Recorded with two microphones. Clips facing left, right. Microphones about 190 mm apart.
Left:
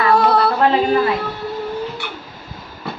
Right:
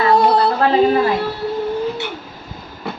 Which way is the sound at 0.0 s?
25° right (ahead or behind).